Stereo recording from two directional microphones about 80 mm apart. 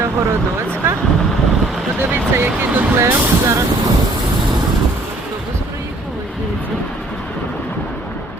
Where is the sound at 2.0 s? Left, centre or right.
Right.